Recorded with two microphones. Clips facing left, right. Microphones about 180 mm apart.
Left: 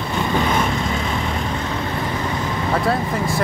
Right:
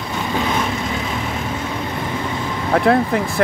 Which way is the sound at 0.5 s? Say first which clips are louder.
Left 1 dB; centre (ahead or behind).